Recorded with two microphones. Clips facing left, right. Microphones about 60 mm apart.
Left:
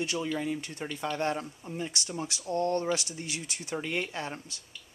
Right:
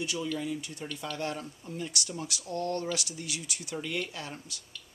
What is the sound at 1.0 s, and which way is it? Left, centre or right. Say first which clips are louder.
Speech: left 5 dB; left.